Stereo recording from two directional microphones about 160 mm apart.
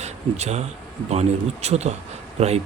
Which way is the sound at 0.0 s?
45° right (ahead or behind).